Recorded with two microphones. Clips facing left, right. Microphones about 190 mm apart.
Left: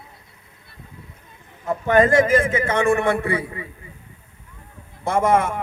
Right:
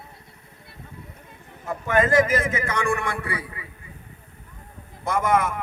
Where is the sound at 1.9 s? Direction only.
30° left (ahead or behind).